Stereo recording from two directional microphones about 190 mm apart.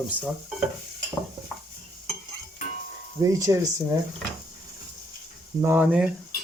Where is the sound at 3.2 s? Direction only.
15° right (ahead or behind).